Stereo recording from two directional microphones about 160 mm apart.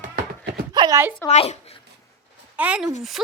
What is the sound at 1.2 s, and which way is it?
Speech, 40° left (ahead or behind).